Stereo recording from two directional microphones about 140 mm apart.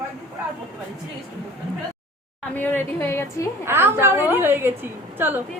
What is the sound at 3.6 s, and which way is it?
A woman's voice, 15° right (ahead or behind).